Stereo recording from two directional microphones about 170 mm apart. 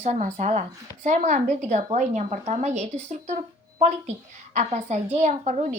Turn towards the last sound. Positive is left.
turn(degrees=-45)  # may be behind; listen again after turning